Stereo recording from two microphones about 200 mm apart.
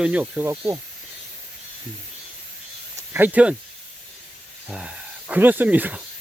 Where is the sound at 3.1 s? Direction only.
10° right (ahead or behind).